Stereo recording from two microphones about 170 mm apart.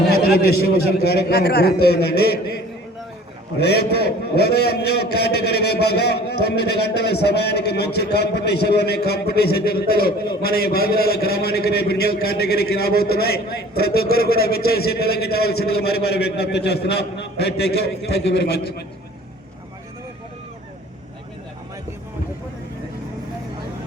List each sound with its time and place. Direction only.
0.2 s a man's voice: 65° left (ahead or behind)
3.6 s a man's voice: 70° left (ahead or behind)